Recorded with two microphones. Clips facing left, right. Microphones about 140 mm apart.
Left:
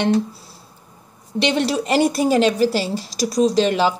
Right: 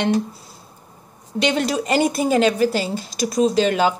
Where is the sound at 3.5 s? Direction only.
30° left (ahead or behind).